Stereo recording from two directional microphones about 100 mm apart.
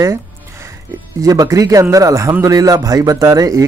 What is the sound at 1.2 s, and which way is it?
Speech, 35° right (ahead or behind).